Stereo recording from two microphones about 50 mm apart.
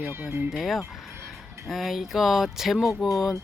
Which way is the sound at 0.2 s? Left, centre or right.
Right.